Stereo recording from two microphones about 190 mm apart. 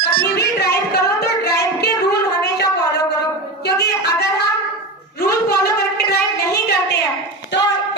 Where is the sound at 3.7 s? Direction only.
60° left (ahead or behind).